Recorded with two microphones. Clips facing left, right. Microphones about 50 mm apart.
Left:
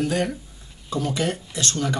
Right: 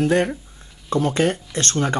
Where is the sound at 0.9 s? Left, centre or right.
Right.